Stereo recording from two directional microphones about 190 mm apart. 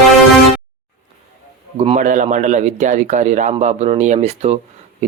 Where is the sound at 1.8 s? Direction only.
35° right (ahead or behind).